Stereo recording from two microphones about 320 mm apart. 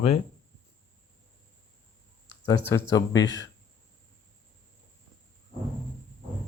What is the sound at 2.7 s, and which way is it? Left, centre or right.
Speech, centre.